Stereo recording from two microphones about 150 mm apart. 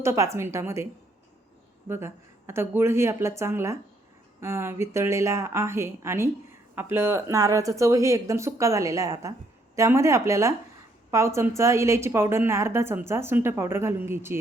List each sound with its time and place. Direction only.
0.0 s speech: 20° right (ahead or behind)
1.9 s a woman's voice: 15° right (ahead or behind)